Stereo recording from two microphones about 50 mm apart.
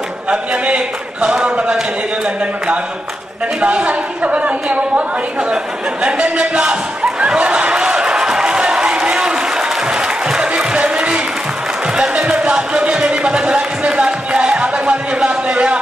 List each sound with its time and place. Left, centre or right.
0.3 s a woman's voice: right
3.6 s a woman's voice: right
6.0 s a sound: right